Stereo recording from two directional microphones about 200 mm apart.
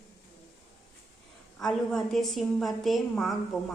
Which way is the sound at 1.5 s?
Centre (ahead or behind).